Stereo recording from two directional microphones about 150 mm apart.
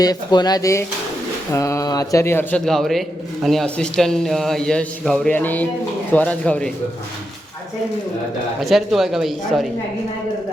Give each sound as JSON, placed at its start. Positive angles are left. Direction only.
{"t": 0.0, "sound": "a man's voice", "side_deg": 25}
{"t": 8.6, "sound": "a man's voice", "side_deg": 0}